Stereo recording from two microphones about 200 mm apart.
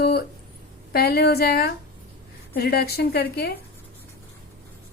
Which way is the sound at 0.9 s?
50° left (ahead or behind).